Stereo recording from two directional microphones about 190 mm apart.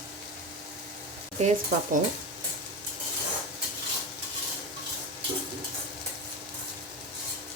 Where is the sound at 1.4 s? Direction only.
35° right (ahead or behind).